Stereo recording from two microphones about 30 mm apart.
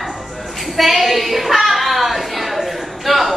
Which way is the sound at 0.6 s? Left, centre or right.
Centre.